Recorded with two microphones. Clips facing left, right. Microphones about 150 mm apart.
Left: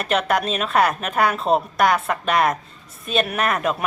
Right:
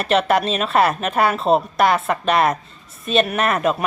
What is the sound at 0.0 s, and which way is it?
A man's voice, centre (ahead or behind).